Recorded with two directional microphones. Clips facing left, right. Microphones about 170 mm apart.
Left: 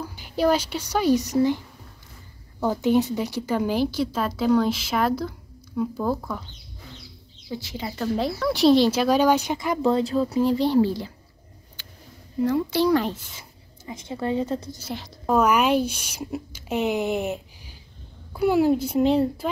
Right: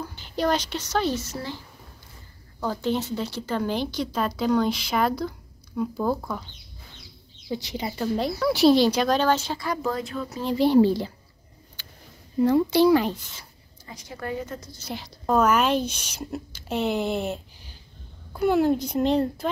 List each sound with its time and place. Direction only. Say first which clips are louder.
0.0 s speech: left 3 dB; 10° left (ahead or behind)
2.6 s speech: left 5 dB; 15° left (ahead or behind); by 6.4 s centre (ahead or behind)
7.5 s speech: right 2 dB; 20° right (ahead or behind)
7.9 s speech: left 1 dB; 5° right (ahead or behind); by 10.2 s 30° left (ahead or behind)
10.3 s speech: left 5 dB; 5° left (ahead or behind)
10.8 s a woman's voice: right 2 dB; 25° right (ahead or behind)
12.7 s speech: right 2 dB; 10° right (ahead or behind)
13.4 s speech: left 3 dB; 20° left (ahead or behind)
14.9 s speech: left 1 dB; centre (ahead or behind)